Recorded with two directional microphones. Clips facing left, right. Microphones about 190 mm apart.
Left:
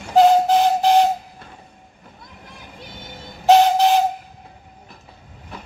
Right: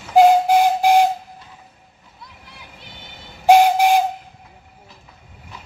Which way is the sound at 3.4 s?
10° right (ahead or behind).